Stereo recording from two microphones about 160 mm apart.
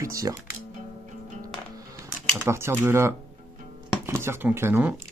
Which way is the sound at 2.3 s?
15° right (ahead or behind).